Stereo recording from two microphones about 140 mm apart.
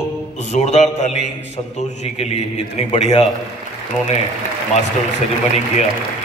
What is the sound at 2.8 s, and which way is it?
Speech, 50° left (ahead or behind).